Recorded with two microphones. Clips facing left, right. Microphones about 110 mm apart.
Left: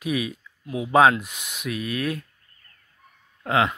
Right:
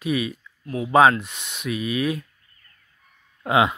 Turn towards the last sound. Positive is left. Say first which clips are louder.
# right 3 dB
turn(degrees=-15)  # may be behind; listen again after turning